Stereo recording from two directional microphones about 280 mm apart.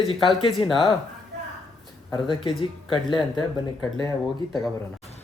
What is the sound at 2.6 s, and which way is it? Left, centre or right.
Speech, centre.